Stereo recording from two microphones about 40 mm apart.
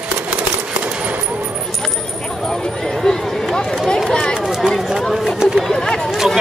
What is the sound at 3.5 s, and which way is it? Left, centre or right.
Run, centre.